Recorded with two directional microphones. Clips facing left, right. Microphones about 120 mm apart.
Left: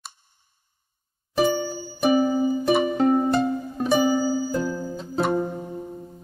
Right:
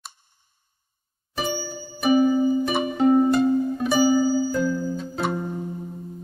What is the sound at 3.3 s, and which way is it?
Music, 30° left (ahead or behind).